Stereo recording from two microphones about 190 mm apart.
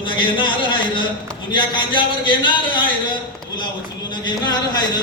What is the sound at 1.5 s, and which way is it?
A man's voice, 25° left (ahead or behind).